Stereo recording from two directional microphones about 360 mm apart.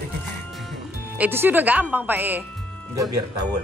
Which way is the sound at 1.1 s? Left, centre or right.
Centre.